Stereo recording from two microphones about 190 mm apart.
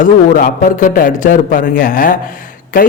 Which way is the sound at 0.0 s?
45° left (ahead or behind).